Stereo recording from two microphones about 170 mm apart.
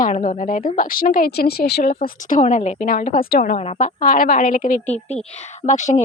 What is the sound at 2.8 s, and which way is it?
Speech, 55° left (ahead or behind).